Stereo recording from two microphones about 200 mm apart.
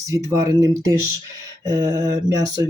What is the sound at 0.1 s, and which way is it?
Speech, 20° right (ahead or behind).